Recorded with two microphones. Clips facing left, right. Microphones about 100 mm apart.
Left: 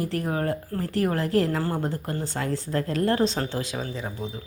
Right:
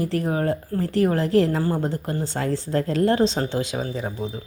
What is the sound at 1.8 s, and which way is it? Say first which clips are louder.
Speech: right 3 dB; 25° right (ahead or behind).